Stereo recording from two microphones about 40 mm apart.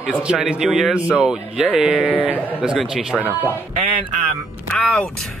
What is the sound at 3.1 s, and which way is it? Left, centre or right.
Speech, left.